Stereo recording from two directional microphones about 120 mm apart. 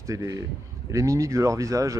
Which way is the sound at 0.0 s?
25° right (ahead or behind).